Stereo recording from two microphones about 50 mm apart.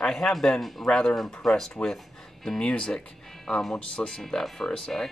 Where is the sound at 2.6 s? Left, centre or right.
Centre.